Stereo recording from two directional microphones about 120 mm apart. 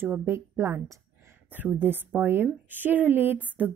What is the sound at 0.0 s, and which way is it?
Speech, 15° right (ahead or behind).